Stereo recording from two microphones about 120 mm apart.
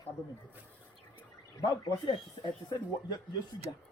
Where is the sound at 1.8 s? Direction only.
40° left (ahead or behind).